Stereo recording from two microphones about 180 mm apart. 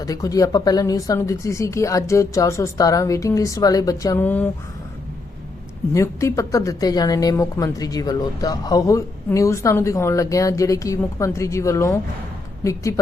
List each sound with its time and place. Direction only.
0.0 s speech: 20° left (ahead or behind)
5.9 s speech: 15° left (ahead or behind)